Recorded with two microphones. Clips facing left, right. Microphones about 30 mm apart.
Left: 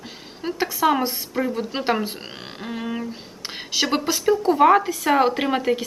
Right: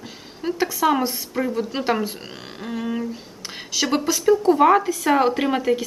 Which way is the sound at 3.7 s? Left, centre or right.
Centre.